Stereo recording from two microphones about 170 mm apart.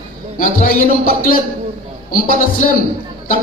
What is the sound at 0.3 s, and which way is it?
A man's voice, 55° left (ahead or behind).